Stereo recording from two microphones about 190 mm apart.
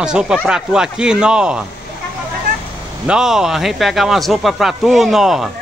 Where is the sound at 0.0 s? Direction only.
5° right (ahead or behind).